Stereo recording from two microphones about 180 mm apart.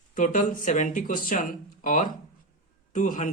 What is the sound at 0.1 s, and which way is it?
Speech, 45° left (ahead or behind).